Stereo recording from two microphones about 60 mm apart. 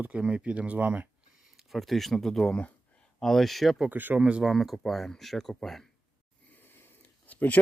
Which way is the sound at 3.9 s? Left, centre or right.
Right.